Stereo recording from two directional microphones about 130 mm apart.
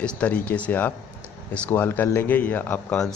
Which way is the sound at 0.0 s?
10° left (ahead or behind).